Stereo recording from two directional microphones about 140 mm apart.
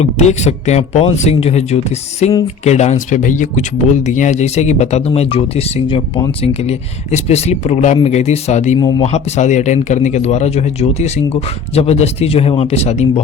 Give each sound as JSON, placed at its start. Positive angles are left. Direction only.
{"t": 0.0, "sound": "speech", "side_deg": 55}